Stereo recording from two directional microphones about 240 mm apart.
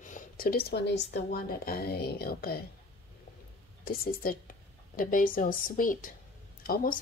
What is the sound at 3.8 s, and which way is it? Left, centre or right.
A woman's voice, left.